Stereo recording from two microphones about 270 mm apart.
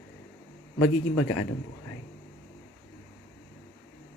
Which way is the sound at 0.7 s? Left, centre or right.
Left.